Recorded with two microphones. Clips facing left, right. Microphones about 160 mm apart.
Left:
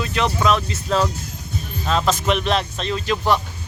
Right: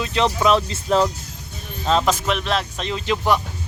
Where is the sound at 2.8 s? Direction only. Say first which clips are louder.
Even; 20° right (ahead or behind).